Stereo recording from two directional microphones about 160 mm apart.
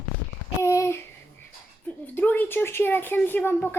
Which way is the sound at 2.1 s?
10° left (ahead or behind).